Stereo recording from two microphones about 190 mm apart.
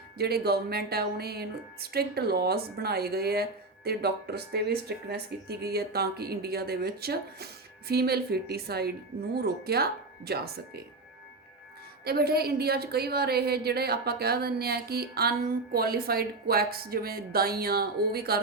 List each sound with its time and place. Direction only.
0.2 s speech: 55° right (ahead or behind)
12.0 s speech: 55° right (ahead or behind)